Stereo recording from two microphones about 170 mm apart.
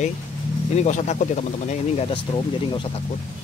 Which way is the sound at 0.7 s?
45° left (ahead or behind).